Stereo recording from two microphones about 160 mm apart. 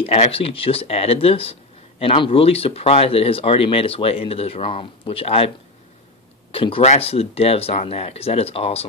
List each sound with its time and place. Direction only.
0.0 s speech: 40° left (ahead or behind)
6.5 s speech: 35° left (ahead or behind)